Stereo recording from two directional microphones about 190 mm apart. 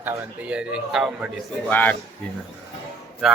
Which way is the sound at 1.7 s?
10° left (ahead or behind).